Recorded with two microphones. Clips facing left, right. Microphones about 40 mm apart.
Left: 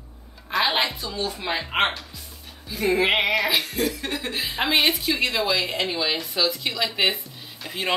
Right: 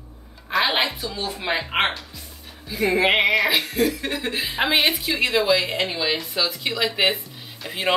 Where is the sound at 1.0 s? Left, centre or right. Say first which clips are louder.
Right 1 dB; centre.